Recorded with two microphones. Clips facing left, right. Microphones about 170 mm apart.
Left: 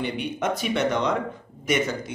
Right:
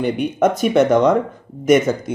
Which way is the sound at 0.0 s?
45° right (ahead or behind).